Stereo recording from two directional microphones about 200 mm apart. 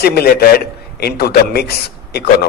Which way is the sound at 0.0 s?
50° left (ahead or behind).